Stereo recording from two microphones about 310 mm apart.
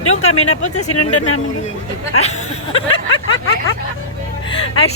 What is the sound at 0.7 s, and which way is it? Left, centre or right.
Speech, left.